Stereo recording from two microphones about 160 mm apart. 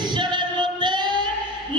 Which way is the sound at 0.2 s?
30° right (ahead or behind).